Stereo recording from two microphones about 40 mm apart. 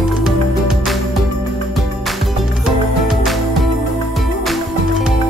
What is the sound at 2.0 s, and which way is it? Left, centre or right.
Music, centre.